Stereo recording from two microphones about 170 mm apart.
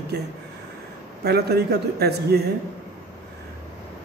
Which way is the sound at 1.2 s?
70° right (ahead or behind).